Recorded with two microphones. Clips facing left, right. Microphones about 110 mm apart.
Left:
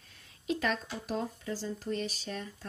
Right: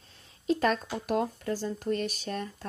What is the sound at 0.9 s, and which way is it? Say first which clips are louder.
Speech: right 6 dB; 60° right (ahead or behind).